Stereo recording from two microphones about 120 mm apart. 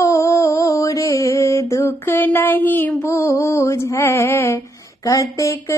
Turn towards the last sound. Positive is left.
turn(degrees=25)  # may be behind; listen again after turning